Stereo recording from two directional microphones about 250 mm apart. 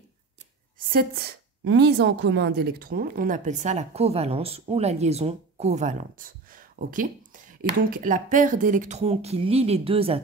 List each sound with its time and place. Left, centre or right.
0.7 s a woman's voice: right